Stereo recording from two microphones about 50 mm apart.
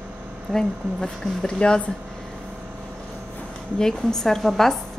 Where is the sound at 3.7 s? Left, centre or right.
Centre.